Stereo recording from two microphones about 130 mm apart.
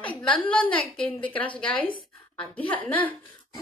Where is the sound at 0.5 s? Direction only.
10° left (ahead or behind).